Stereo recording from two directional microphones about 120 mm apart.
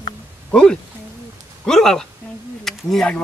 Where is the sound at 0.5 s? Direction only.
5° left (ahead or behind).